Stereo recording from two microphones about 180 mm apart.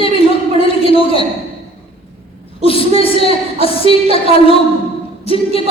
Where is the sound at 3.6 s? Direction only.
30° left (ahead or behind).